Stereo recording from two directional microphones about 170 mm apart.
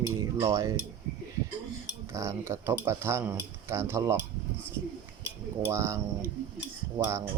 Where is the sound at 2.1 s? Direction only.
15° right (ahead or behind).